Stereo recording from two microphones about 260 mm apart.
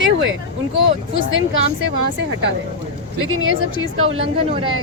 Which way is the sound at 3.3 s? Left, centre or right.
Right.